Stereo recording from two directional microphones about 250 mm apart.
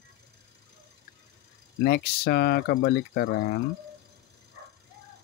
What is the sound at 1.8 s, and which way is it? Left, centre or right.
Speech, left.